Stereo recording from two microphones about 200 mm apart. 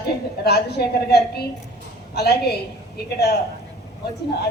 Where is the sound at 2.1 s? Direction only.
55° left (ahead or behind).